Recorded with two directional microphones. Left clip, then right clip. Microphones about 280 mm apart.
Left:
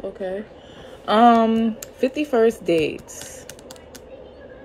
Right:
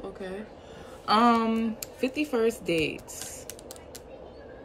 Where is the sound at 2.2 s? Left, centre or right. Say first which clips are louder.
Left 9 dB; centre.